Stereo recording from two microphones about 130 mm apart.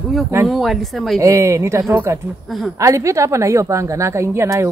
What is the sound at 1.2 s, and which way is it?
Speech, 20° right (ahead or behind).